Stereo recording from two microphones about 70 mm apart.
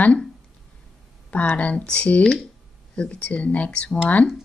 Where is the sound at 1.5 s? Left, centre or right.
Centre.